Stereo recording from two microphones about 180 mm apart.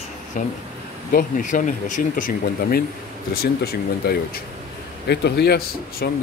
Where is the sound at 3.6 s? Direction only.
60° left (ahead or behind).